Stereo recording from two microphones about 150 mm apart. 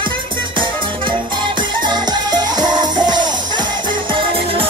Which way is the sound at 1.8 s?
30° right (ahead or behind).